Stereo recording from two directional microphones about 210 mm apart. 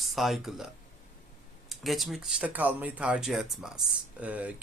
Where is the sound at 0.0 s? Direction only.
Centre (ahead or behind).